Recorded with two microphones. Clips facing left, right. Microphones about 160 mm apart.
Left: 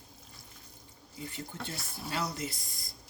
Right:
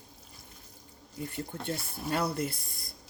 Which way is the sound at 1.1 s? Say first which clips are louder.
Right 4 dB; 55° right (ahead or behind).